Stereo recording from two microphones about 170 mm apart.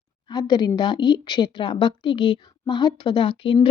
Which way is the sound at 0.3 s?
25° left (ahead or behind).